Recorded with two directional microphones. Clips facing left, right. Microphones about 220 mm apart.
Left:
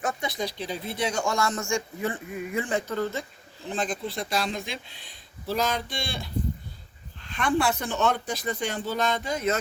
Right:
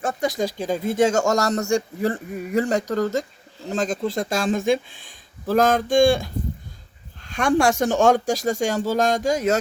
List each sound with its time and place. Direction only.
0.0 s a man's voice: 35° right (ahead or behind)